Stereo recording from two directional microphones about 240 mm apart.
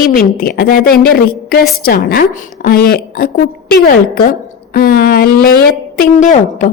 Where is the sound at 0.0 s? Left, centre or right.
Left.